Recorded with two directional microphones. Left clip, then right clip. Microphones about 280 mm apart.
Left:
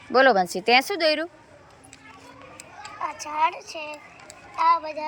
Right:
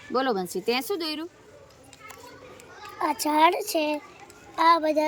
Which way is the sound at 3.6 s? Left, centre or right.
Right.